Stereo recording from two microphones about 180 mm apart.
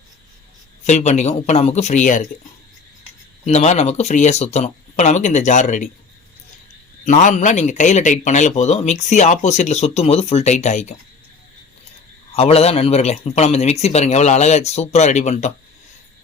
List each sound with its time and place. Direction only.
0.9 s a man's voice: 40° left (ahead or behind)
3.4 s a man's voice: 35° left (ahead or behind)
7.0 s a man's voice: 45° left (ahead or behind)
12.3 s a man's voice: 35° left (ahead or behind)